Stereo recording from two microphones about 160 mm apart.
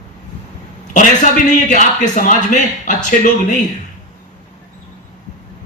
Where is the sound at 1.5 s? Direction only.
50° left (ahead or behind).